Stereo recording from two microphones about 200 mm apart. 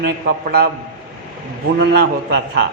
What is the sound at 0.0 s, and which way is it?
Speech, 50° right (ahead or behind).